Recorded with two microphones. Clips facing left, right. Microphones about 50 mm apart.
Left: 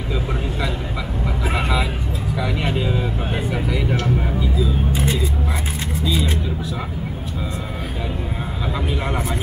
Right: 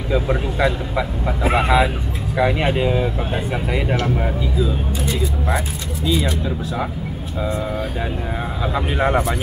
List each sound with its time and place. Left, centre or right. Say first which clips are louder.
0.6 s speech: right 6 dB; right
8.9 s speech: right 10 dB; right